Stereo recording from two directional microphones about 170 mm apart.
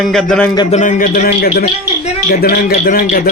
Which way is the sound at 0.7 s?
45° left (ahead or behind).